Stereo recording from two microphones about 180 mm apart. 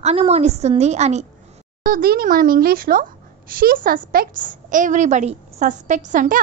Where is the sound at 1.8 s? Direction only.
55° right (ahead or behind).